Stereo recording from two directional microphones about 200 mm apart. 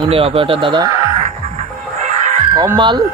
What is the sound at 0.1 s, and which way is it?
Speech, 30° right (ahead or behind).